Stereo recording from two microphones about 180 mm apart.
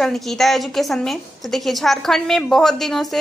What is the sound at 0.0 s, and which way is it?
A woman's voice, centre (ahead or behind).